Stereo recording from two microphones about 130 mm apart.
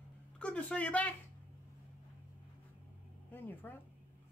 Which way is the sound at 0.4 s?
10° left (ahead or behind).